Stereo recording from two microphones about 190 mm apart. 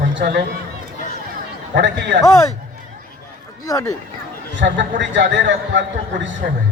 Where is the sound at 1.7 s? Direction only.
65° right (ahead or behind).